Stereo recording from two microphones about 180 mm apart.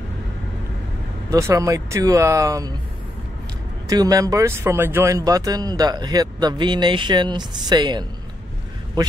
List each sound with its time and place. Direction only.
1.3 s speech: 15° right (ahead or behind)
3.8 s speech: 20° right (ahead or behind)